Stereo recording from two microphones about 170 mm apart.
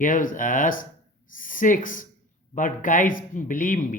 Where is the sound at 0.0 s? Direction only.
55° left (ahead or behind).